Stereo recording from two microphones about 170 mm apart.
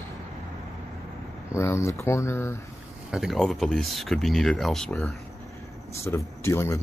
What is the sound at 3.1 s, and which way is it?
Speech, centre (ahead or behind).